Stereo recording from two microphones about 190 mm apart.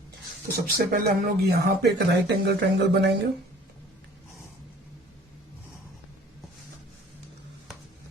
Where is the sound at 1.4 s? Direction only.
55° right (ahead or behind).